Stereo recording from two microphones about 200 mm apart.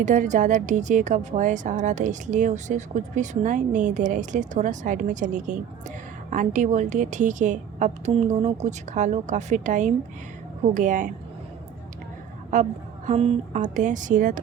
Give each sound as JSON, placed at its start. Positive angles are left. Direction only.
{"t": 0.0, "sound": "speech", "side_deg": -40}
{"t": 12.5, "sound": "speech", "side_deg": -40}